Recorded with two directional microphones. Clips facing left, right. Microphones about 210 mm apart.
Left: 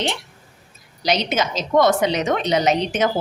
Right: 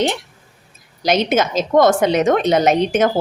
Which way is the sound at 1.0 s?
50° right (ahead or behind).